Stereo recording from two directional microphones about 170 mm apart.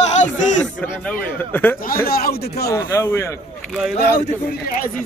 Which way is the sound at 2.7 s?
20° left (ahead or behind).